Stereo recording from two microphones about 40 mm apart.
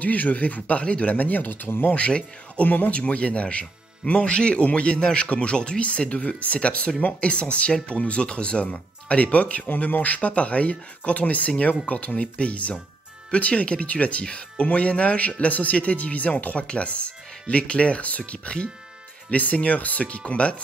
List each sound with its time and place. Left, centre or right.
0.0 s speech: left
1.1 s speech: left
1.7 s speech: left
2.0 s speech: left
9.7 s speech: left